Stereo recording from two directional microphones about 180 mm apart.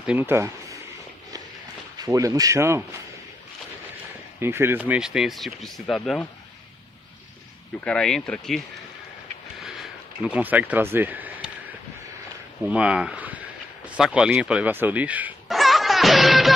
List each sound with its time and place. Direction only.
0.0 s speech: 10° right (ahead or behind)
2.0 s speech: 20° right (ahead or behind)
4.4 s speech: 15° right (ahead or behind)
7.8 s speech: 5° left (ahead or behind)
9.6 s a sound: centre (ahead or behind)
12.6 s speech: 5° right (ahead or behind)